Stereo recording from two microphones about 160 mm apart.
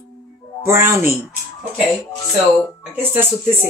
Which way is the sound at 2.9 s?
15° right (ahead or behind).